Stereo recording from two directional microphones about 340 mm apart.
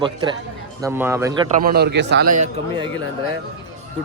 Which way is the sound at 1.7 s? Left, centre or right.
Right.